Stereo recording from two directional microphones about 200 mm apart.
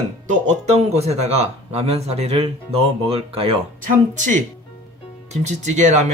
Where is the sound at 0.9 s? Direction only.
30° right (ahead or behind).